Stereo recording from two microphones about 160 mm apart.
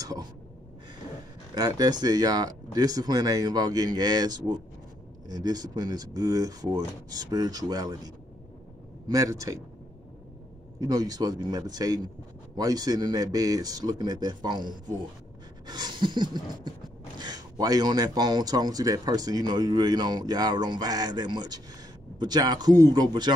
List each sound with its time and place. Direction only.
0.0 s speech: 25° right (ahead or behind)
1.5 s speech: 25° right (ahead or behind)
10.8 s speech: 25° right (ahead or behind)